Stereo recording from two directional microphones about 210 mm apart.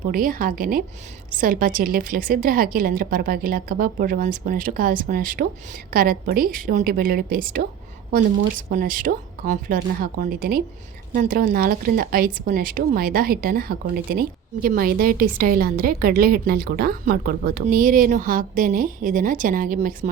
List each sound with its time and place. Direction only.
0.1 s speech: 40° right (ahead or behind)
8.7 s speech: 40° right (ahead or behind)